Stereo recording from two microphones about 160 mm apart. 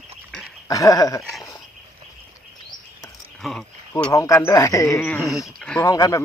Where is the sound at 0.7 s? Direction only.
20° left (ahead or behind).